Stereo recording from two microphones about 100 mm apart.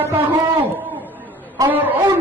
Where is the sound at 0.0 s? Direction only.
20° right (ahead or behind).